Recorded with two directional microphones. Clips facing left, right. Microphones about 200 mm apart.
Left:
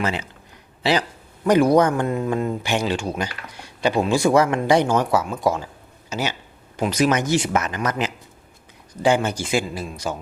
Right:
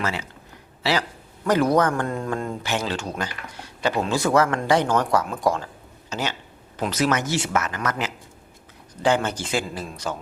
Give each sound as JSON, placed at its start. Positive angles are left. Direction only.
{"t": 0.0, "sound": "speech", "side_deg": 20}